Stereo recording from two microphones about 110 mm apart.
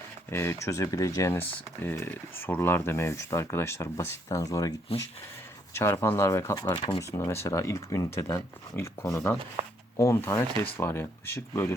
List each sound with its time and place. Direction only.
0.3 s speech: 25° left (ahead or behind)
1.3 s speech: 20° left (ahead or behind)
4.9 s speech: 60° left (ahead or behind)
5.7 s speech: 25° left (ahead or behind)